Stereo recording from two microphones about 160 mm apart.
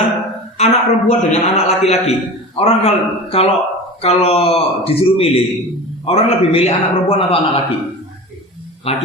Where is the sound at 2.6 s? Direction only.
40° left (ahead or behind).